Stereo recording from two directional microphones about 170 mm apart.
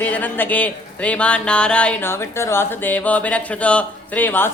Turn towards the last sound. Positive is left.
turn(degrees=10)  # may be behind; listen again after turning